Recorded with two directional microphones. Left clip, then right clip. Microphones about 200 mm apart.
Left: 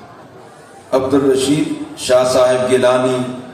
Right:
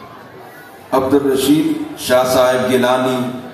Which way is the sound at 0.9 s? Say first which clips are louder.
Even; 40° left (ahead or behind).